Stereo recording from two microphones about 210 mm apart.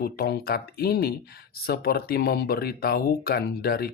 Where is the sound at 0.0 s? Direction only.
45° left (ahead or behind).